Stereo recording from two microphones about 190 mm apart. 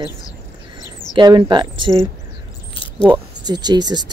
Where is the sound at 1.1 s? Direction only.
25° right (ahead or behind).